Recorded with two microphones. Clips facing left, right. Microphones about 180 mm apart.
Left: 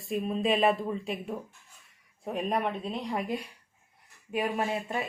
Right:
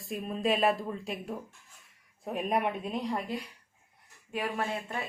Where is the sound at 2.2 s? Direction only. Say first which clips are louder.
Even; 5° right (ahead or behind).